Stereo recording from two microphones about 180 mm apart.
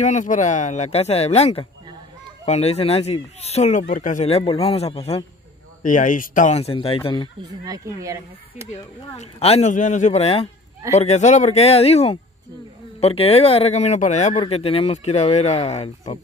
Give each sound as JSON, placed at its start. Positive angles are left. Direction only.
{"t": 0.0, "sound": "speech", "side_deg": 45}
{"t": 5.8, "sound": "speech", "side_deg": 45}
{"t": 7.6, "sound": "speech", "side_deg": -20}
{"t": 9.1, "sound": "speech", "side_deg": 35}